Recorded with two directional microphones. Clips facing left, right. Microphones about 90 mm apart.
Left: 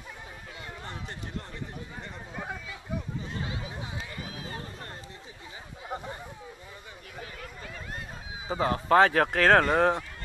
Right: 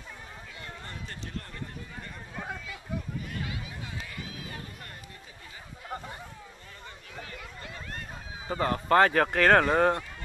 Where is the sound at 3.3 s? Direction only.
25° left (ahead or behind).